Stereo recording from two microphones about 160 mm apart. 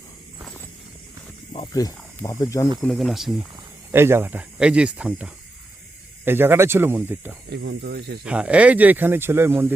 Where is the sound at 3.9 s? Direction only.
15° right (ahead or behind).